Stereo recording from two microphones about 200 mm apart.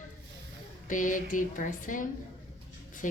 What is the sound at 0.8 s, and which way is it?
A woman's voice, 40° left (ahead or behind).